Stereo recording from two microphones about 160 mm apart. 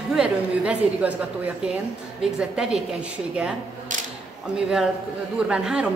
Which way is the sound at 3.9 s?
50° right (ahead or behind).